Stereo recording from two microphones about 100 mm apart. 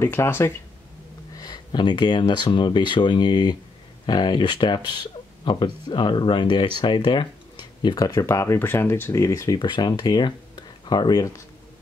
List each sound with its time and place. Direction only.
0.0 s speech: 25° left (ahead or behind)
1.3 s speech: 45° left (ahead or behind)
9.6 s speech: 45° left (ahead or behind)